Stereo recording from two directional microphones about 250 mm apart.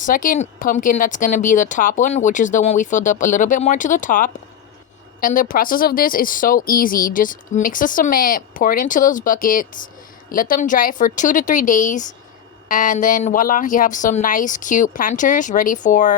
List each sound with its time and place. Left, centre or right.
0.0 s a woman's voice: left